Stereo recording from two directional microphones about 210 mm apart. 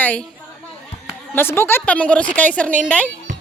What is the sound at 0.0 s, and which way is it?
Speech, 5° left (ahead or behind).